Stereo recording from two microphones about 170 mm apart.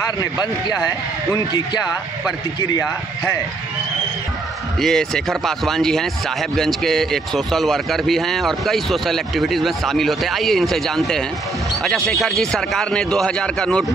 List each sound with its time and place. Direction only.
1.3 s speech: 25° left (ahead or behind)
4.7 s speech: 5° left (ahead or behind)